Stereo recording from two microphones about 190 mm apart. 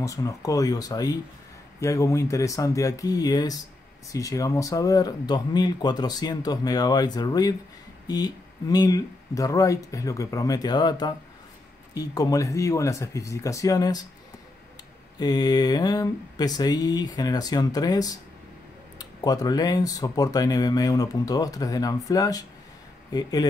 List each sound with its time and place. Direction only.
0.0 s speech: 15° left (ahead or behind)
15.1 s speech: 20° left (ahead or behind)